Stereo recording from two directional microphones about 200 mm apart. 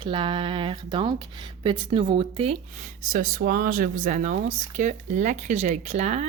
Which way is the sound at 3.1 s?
45° right (ahead or behind).